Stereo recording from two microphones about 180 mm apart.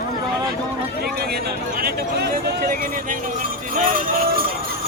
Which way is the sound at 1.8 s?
55° right (ahead or behind).